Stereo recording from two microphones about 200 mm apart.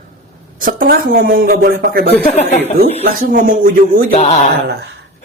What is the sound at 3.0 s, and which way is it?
Speech, 45° right (ahead or behind).